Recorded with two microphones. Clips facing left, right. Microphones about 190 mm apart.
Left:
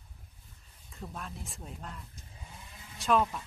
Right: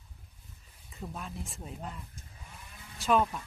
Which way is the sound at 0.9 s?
Centre (ahead or behind).